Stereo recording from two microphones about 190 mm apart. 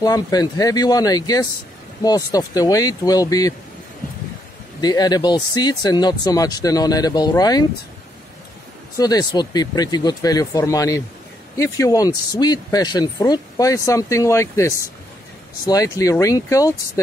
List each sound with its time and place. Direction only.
0.0 s speech: 20° left (ahead or behind)
4.8 s speech: 20° left (ahead or behind)
8.9 s speech: 20° left (ahead or behind)